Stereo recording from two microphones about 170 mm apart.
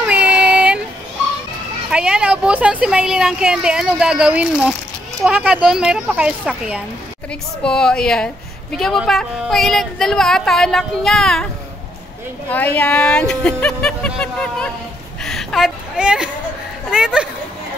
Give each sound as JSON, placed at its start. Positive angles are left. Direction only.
{"t": 0.0, "sound": "child singing", "side_deg": -5}
{"t": 1.9, "sound": "a woman's voice", "side_deg": -5}
{"t": 12.4, "sound": "a woman's voice", "side_deg": 10}
{"t": 15.2, "sound": "a sound", "side_deg": 0}
{"t": 16.9, "sound": "speech", "side_deg": -5}